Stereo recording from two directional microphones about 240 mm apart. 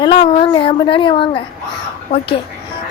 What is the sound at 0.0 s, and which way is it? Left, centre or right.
Speech, left.